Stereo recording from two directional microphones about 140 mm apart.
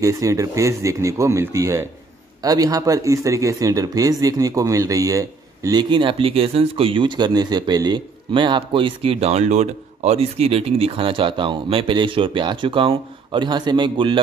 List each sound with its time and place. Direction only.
0.0 s speech: 25° right (ahead or behind)